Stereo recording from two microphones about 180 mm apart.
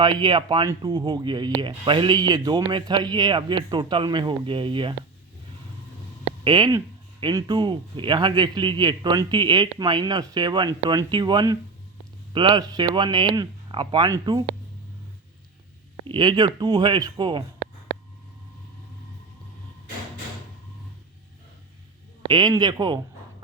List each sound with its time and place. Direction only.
0.0 s speech: 25° right (ahead or behind)
6.2 s speech: 30° right (ahead or behind)
16.0 s speech: 25° right (ahead or behind)
22.3 s speech: 25° right (ahead or behind)